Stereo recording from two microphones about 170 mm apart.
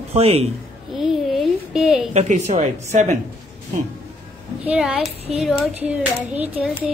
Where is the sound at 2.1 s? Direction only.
45° right (ahead or behind).